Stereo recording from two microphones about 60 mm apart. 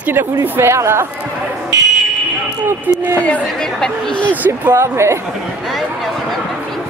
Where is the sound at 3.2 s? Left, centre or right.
Left.